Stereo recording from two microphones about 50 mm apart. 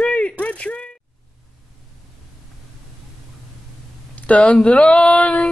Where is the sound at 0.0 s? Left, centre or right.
Left.